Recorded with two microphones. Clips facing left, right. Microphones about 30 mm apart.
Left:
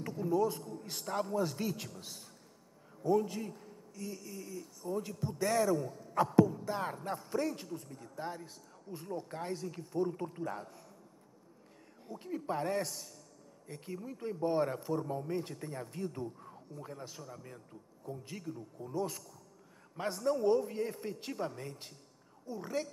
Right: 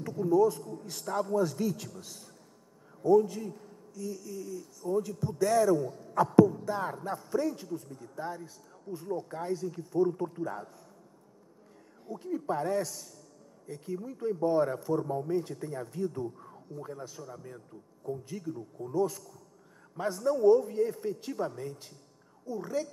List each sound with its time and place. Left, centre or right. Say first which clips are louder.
0.0 s a man's voice: right 6 dB; centre
12.1 s speech: right 5 dB; centre
20.2 s speech: right 7 dB; centre